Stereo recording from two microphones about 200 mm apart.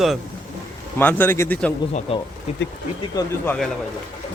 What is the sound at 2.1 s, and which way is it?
Speech, 30° left (ahead or behind).